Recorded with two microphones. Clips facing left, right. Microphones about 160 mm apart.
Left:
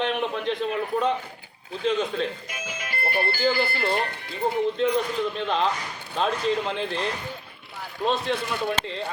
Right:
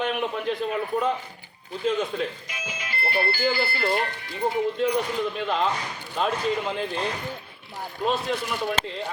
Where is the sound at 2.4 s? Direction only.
45° left (ahead or behind).